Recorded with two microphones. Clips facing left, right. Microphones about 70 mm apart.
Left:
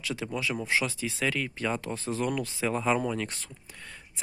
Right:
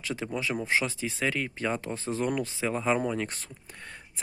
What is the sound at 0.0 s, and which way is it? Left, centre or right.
Speech, right.